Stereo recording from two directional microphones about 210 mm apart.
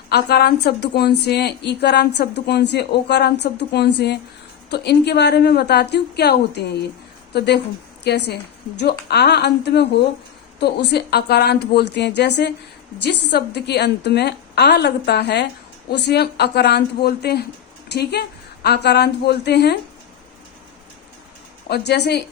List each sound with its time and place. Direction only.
0.1 s a woman's voice: 50° left (ahead or behind)
21.7 s a woman's voice: 50° left (ahead or behind)